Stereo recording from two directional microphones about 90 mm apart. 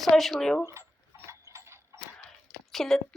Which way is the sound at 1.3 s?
35° right (ahead or behind).